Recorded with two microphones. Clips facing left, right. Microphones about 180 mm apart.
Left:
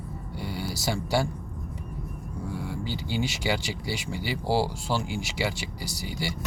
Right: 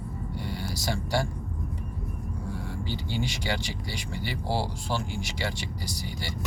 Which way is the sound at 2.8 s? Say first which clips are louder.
Left 1 dB; 10° left (ahead or behind).